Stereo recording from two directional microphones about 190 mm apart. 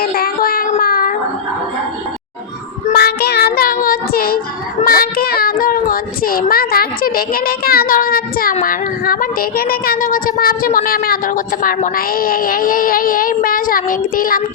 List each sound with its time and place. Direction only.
0.0 s a sound: 50° left (ahead or behind)
2.9 s child singing: 55° left (ahead or behind)
4.8 s a child's voice: 50° left (ahead or behind)